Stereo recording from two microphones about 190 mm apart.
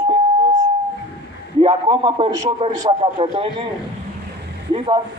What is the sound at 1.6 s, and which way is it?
A man's voice, 25° right (ahead or behind).